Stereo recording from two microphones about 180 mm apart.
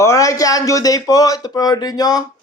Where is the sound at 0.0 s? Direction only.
15° left (ahead or behind).